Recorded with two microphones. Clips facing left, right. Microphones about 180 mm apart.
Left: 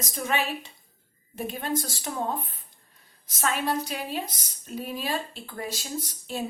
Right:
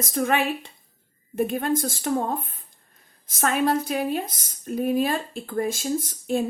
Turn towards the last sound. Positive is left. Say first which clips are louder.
# right 8 dB
turn(degrees=-50)  # may be behind; listen again after turning